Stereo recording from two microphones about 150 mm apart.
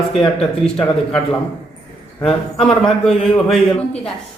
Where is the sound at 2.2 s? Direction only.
Centre (ahead or behind).